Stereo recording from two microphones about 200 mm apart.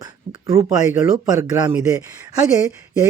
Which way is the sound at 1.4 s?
15° right (ahead or behind).